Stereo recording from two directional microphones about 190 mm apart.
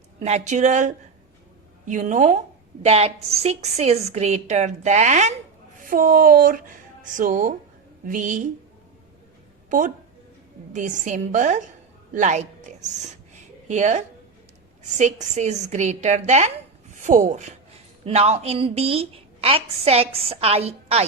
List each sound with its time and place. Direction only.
0.2 s a woman's voice: 35° right (ahead or behind)
9.6 s a woman's voice: 45° right (ahead or behind)